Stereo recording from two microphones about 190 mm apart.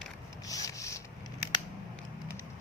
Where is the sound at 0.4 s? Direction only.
15° left (ahead or behind).